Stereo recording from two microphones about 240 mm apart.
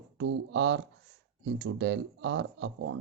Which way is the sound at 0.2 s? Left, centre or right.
Right.